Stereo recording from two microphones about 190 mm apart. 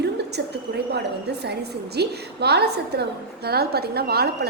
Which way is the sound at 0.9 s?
60° right (ahead or behind).